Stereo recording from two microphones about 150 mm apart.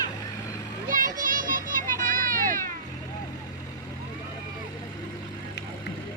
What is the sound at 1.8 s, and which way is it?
Vehicle, 65° right (ahead or behind).